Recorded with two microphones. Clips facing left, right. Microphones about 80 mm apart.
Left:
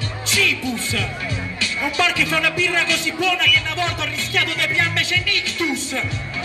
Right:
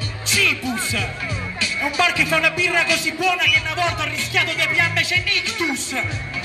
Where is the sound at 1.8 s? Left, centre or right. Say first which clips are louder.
Right 1 dB; centre.